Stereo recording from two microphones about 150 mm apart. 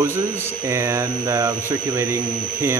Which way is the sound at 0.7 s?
20° right (ahead or behind).